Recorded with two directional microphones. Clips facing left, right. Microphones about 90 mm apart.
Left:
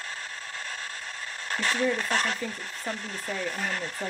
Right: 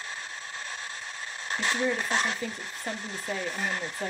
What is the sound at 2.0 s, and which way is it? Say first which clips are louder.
Speech: left 1 dB; 50° left (ahead or behind).